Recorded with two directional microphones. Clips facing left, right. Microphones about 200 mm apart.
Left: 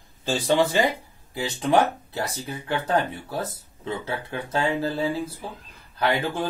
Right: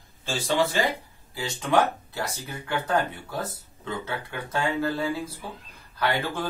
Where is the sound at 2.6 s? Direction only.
30° left (ahead or behind).